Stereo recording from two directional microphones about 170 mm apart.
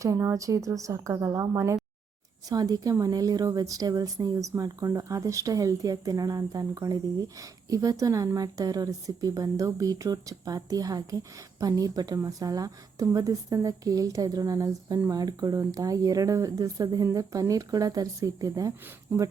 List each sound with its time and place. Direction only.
0.0 s a woman's voice: 15° right (ahead or behind)